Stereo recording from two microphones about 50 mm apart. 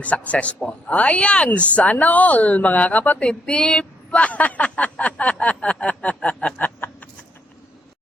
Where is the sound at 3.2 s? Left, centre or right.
Centre.